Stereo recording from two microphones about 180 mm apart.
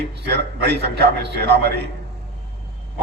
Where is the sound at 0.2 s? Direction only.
70° right (ahead or behind).